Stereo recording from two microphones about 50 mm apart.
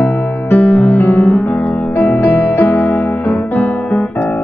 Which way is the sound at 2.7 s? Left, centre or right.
Left.